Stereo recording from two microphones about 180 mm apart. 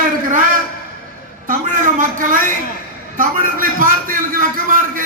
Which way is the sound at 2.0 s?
45° right (ahead or behind).